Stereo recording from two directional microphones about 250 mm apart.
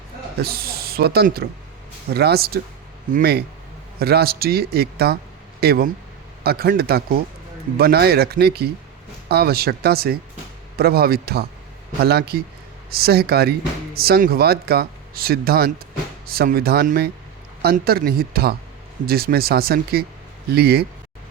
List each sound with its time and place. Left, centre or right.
0.4 s speech: right